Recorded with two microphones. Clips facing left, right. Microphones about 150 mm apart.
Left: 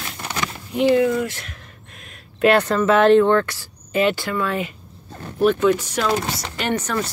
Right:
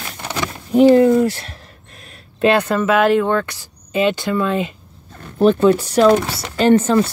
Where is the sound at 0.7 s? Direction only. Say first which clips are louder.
Right 7 dB; 40° right (ahead or behind).